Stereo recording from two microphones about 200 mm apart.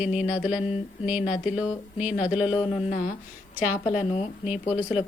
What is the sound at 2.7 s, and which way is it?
Speech, 30° left (ahead or behind).